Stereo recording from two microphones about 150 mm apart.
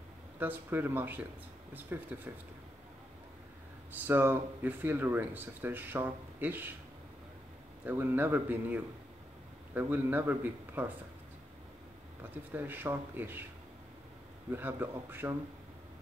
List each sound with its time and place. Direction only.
0.4 s speech: 15° right (ahead or behind)
4.0 s speech: 15° right (ahead or behind)
7.8 s speech: 15° right (ahead or behind)
12.2 s speech: 15° right (ahead or behind)
14.5 s speech: 15° right (ahead or behind)